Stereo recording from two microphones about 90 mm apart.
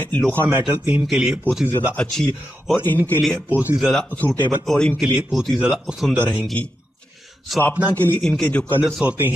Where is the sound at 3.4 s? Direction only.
20° right (ahead or behind).